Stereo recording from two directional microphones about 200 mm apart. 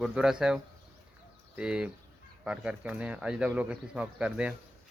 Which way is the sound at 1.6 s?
5° right (ahead or behind).